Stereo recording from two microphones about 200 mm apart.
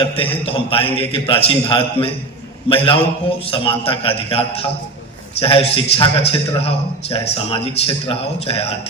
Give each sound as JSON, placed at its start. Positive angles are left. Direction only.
{"t": 0.0, "sound": "a man's voice", "side_deg": 25}